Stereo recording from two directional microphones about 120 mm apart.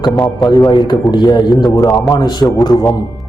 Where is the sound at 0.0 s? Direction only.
35° left (ahead or behind).